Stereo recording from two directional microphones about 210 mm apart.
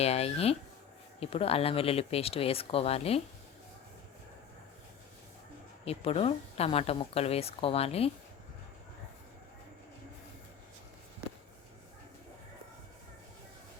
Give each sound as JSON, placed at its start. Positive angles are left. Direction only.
{"t": 0.0, "sound": "speech", "side_deg": 30}
{"t": 5.8, "sound": "speech", "side_deg": 30}